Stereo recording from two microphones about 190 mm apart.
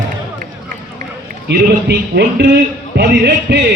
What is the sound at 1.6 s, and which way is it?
Speech, 60° right (ahead or behind).